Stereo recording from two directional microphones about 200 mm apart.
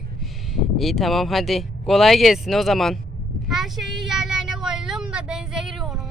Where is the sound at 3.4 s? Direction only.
Centre (ahead or behind).